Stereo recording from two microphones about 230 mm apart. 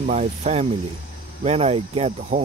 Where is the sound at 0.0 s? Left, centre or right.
Right.